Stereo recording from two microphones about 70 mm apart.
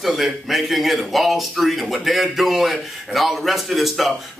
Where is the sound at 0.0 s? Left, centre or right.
Centre.